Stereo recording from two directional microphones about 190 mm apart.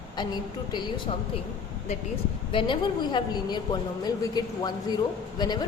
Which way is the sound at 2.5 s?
25° left (ahead or behind).